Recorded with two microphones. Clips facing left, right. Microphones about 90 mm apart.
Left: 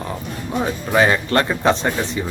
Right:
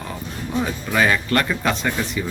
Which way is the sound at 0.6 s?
30° left (ahead or behind).